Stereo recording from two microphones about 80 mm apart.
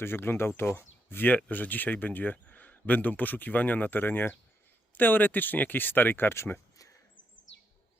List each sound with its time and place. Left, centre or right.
0.0 s speech: left